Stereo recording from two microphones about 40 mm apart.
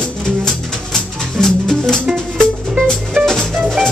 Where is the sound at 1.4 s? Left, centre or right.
Centre.